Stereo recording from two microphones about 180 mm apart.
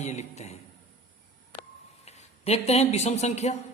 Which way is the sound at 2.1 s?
35° left (ahead or behind).